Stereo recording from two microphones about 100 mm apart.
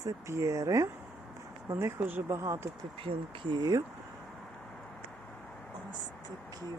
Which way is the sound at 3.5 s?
40° right (ahead or behind).